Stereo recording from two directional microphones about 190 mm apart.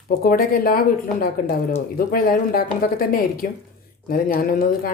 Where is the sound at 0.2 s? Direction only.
50° left (ahead or behind).